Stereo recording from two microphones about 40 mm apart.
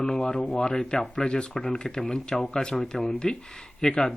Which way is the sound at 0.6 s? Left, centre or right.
Centre.